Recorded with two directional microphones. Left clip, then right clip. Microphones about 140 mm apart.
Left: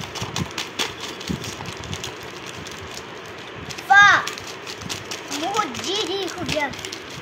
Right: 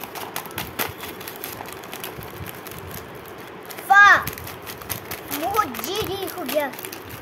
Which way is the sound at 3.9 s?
30° right (ahead or behind).